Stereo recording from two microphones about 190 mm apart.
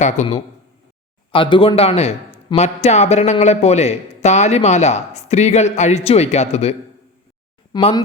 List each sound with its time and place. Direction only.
0.0 s a man's voice: 35° left (ahead or behind)